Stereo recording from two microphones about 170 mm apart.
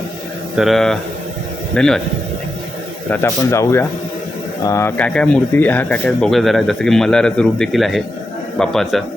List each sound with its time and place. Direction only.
0.5 s speech: centre (ahead or behind)
3.1 s speech: 15° left (ahead or behind)